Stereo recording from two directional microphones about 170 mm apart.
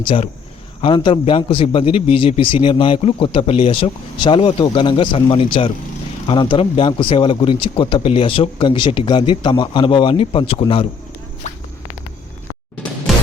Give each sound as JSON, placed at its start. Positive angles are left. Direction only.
{"t": 0.0, "sound": "a man's voice", "side_deg": 30}